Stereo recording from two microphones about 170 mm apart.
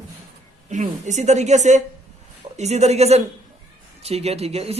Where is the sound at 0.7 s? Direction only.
45° right (ahead or behind).